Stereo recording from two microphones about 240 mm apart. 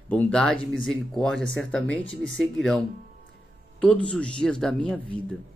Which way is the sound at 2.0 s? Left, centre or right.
Left.